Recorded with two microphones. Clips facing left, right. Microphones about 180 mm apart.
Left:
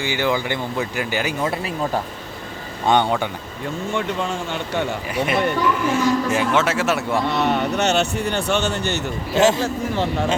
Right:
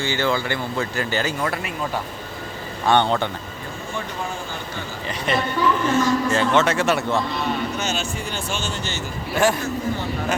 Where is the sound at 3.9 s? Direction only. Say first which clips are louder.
Left 5 dB; 80° left.